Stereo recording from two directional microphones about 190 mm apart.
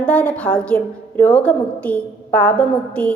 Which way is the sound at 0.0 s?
5° left (ahead or behind).